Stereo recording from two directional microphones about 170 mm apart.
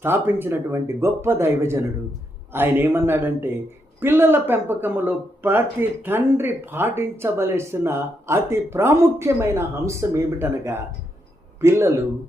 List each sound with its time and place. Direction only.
0.0 s speech: 15° right (ahead or behind)